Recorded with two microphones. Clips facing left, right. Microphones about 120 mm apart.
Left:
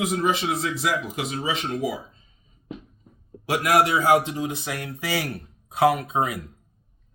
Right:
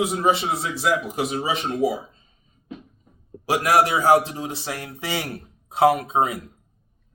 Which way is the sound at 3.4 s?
30° right (ahead or behind).